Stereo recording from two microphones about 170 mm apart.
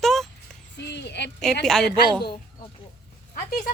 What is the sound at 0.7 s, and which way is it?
Speech, 90° left.